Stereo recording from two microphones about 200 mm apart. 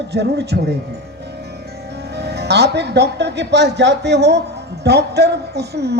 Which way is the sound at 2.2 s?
55° right (ahead or behind).